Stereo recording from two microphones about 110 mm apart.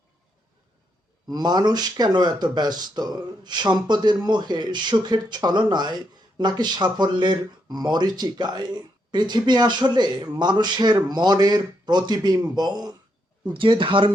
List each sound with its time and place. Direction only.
1.3 s speech: 40° right (ahead or behind)
13.5 s speech: 50° right (ahead or behind)